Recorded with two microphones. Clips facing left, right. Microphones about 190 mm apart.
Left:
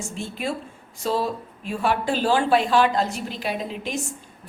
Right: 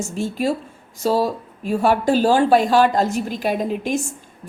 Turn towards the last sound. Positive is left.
turn(degrees=-50)  # may be behind; listen again after turning